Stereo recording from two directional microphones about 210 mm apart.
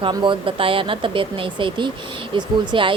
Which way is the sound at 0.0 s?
25° right (ahead or behind).